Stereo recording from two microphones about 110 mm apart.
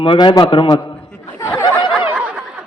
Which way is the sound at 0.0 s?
55° left (ahead or behind).